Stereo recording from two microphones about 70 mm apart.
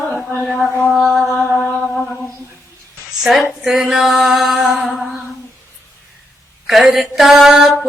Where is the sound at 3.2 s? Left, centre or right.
Centre.